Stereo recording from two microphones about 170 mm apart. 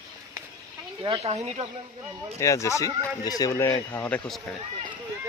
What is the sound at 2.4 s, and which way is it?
Speech, 15° left (ahead or behind).